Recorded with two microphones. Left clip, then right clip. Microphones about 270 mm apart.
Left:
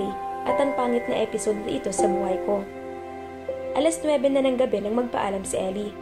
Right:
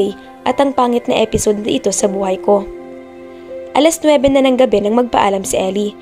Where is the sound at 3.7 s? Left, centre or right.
Right.